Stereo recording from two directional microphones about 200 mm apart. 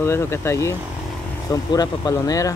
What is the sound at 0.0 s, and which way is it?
Speech, 15° left (ahead or behind).